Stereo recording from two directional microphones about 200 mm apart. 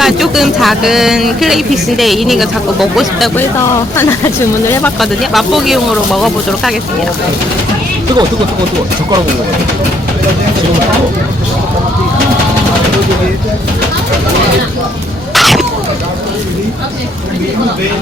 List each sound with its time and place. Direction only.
0.0 s speech: centre (ahead or behind)
3.9 s speech: 10° left (ahead or behind)
4.9 s speech: centre (ahead or behind)
15.4 s a sound: centre (ahead or behind)